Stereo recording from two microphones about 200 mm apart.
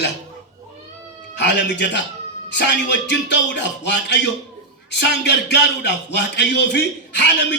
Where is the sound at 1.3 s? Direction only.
60° left (ahead or behind).